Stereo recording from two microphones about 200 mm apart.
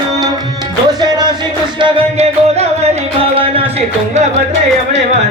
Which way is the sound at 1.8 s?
30° right (ahead or behind).